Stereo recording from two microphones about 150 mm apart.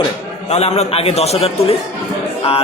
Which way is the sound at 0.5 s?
45° left (ahead or behind).